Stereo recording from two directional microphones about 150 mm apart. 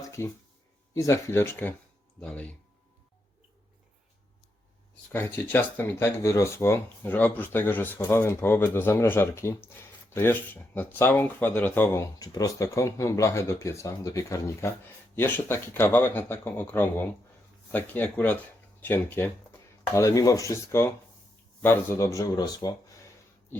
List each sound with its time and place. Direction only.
0.2 s speech: 20° left (ahead or behind)
5.1 s speech: 15° left (ahead or behind)